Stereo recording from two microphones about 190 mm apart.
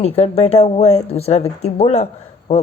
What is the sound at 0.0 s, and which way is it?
A woman's voice, 35° left (ahead or behind).